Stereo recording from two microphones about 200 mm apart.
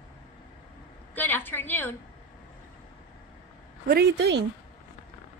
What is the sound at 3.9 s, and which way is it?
Speech, 55° right (ahead or behind).